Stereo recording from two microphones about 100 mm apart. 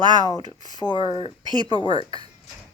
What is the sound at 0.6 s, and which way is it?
Speech, 45° left (ahead or behind).